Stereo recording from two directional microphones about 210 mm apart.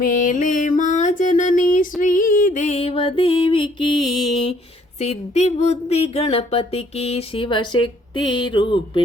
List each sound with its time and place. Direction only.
0.0 s music: 40° left (ahead or behind); by 3.9 s 25° left (ahead or behind)
4.9 s speech: 35° left (ahead or behind)